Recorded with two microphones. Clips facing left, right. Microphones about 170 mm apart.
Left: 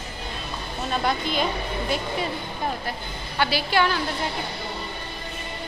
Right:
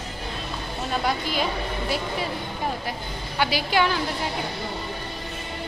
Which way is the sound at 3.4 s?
15° right (ahead or behind).